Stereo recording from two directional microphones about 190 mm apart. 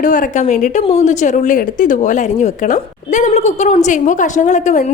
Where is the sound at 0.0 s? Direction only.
45° left (ahead or behind).